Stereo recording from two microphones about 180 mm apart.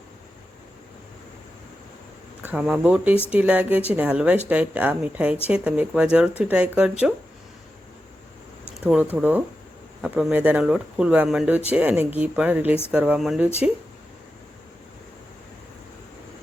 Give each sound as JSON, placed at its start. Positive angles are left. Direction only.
{"t": 2.5, "sound": "speech", "side_deg": -5}
{"t": 8.7, "sound": "speech", "side_deg": -5}